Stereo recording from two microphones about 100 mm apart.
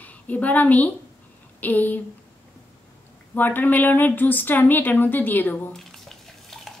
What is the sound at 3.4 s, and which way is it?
A woman's voice, 20° left (ahead or behind).